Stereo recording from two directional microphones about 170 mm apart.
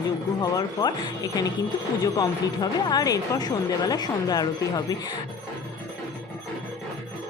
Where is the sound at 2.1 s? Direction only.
25° left (ahead or behind).